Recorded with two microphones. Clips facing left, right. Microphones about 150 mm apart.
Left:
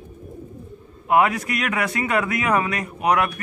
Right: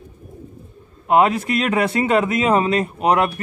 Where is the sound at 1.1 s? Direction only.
25° right (ahead or behind).